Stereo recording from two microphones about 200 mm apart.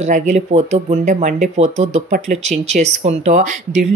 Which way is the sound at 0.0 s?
35° right (ahead or behind).